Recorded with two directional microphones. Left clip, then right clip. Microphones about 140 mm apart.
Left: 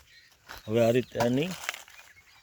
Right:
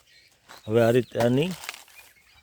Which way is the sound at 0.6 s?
55° right (ahead or behind).